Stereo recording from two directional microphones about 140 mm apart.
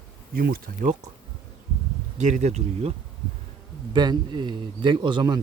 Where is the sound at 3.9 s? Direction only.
30° right (ahead or behind).